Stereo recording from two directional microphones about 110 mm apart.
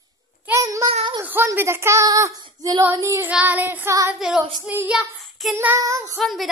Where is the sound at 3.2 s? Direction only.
15° right (ahead or behind).